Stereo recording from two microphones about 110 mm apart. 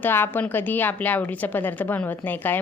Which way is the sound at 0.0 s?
20° left (ahead or behind).